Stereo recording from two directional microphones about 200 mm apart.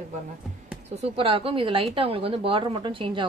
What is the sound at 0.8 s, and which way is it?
A woman's voice, 30° right (ahead or behind).